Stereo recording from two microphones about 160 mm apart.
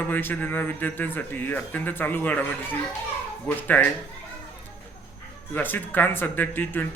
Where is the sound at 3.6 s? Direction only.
10° left (ahead or behind).